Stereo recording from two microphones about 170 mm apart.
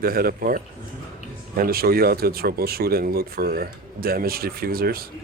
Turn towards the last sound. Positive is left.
turn(degrees=-60)  # may be behind; listen again after turning